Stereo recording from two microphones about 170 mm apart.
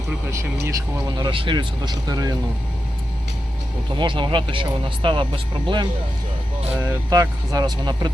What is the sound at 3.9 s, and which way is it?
Speech, 30° right (ahead or behind).